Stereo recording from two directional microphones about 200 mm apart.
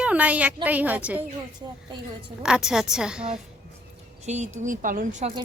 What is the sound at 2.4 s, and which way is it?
Speech, 5° right (ahead or behind).